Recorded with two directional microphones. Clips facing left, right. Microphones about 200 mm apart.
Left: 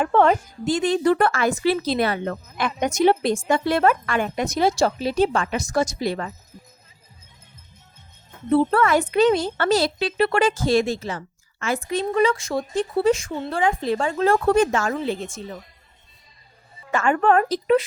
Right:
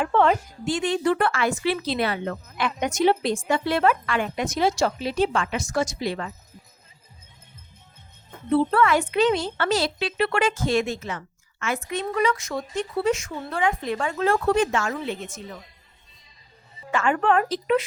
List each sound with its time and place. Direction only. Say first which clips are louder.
0.0 s a woman's voice: left 3 dB; 45° left (ahead or behind)
8.4 s a woman's voice: left 2 dB; 45° left (ahead or behind)
14.4 s a woman's voice: left 3 dB; 45° left (ahead or behind)
16.9 s speech: left 3 dB; 45° left (ahead or behind)